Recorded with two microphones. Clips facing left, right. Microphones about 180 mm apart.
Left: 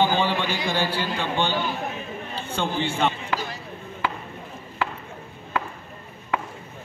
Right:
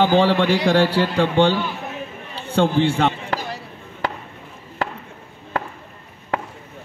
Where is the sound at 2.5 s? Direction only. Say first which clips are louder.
Right 9 dB; 75° right (ahead or behind).